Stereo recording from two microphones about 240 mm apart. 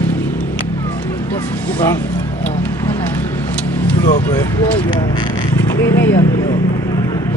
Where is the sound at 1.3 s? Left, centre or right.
Centre.